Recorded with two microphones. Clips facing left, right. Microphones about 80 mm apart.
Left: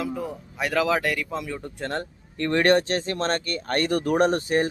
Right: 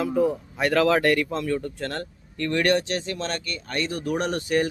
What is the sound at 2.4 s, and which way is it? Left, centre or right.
Speech, left.